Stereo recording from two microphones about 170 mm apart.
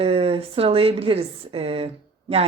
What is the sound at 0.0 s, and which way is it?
Speech, 35° right (ahead or behind).